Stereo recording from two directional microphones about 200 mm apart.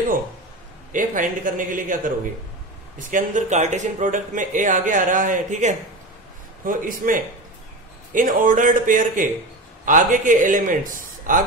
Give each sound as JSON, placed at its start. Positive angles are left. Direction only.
{"t": 0.9, "sound": "a man's voice", "side_deg": -40}